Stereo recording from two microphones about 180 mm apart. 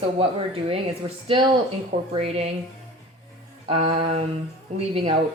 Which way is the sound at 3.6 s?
35° right (ahead or behind).